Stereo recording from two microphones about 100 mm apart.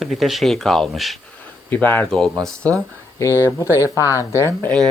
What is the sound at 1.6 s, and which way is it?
Speech, 20° left (ahead or behind).